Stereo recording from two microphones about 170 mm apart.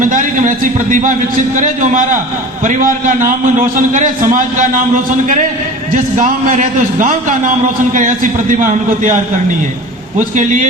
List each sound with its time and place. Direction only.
0.0 s a man's voice: 50° right (ahead or behind)
10.2 s a man's voice: 45° right (ahead or behind)